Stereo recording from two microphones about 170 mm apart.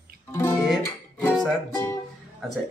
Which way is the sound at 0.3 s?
15° left (ahead or behind).